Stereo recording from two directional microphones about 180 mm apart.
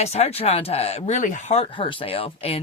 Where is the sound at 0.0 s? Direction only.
35° left (ahead or behind).